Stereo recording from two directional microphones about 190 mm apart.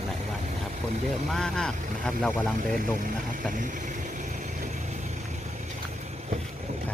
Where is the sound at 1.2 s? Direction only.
Centre (ahead or behind).